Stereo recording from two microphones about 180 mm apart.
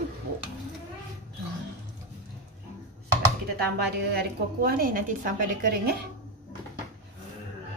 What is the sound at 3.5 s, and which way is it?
A woman's voice, 60° right (ahead or behind).